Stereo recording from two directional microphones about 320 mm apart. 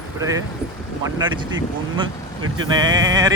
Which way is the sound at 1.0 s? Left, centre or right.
Centre.